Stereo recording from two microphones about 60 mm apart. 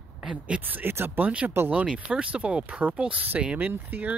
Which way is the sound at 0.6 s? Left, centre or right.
Right.